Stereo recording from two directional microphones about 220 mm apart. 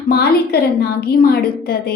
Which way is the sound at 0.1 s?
45° left (ahead or behind).